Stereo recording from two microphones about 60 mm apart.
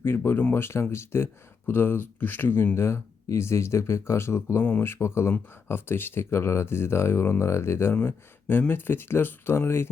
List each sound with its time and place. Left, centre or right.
0.0 s speech: left
0.5 s speech: left
2.7 s speech: left
7.9 s speech: left